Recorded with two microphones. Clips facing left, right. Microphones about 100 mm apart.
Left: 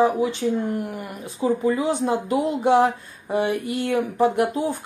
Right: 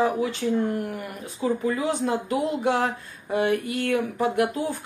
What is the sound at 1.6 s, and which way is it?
Speech, 25° left (ahead or behind).